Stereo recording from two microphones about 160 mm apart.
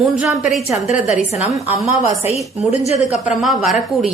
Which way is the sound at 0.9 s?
45° left (ahead or behind).